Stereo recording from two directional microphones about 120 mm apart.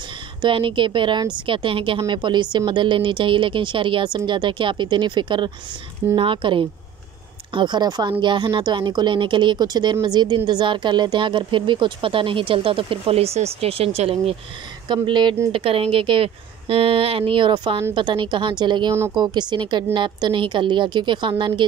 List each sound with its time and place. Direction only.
0.4 s a woman's voice: 45° right (ahead or behind)
14.9 s a woman's voice: 40° right (ahead or behind)